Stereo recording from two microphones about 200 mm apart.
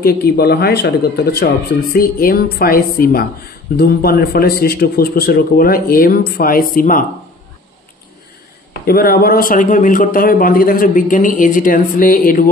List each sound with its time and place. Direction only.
0.0 s speech: 50° left (ahead or behind)
8.8 s speech: 50° left (ahead or behind)